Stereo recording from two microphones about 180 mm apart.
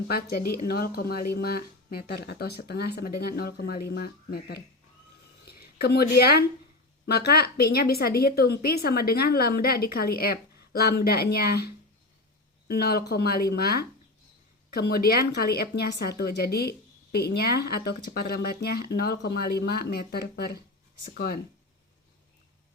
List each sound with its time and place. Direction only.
0.1 s speech: 60° left (ahead or behind)
5.5 s a sound: 60° left (ahead or behind)
7.0 s speech: 65° left (ahead or behind)